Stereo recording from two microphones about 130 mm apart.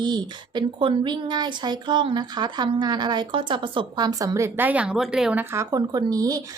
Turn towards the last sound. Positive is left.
turn(degrees=-30)  # may be behind; listen again after turning